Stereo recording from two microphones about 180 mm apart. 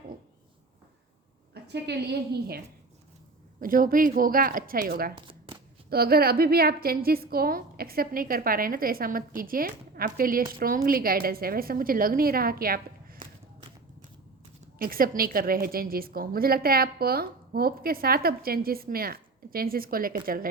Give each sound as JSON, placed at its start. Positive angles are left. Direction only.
{"t": 1.6, "sound": "a woman's voice", "side_deg": -70}
{"t": 3.6, "sound": "a woman's voice", "side_deg": -50}
{"t": 5.1, "sound": "shuffling cards", "side_deg": -30}
{"t": 5.9, "sound": "a woman's voice", "side_deg": -60}
{"t": 13.1, "sound": "walk", "side_deg": -25}
{"t": 14.8, "sound": "a woman's voice", "side_deg": -55}